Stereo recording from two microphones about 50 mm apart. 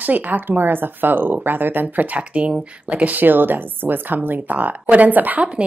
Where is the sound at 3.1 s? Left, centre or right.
Right.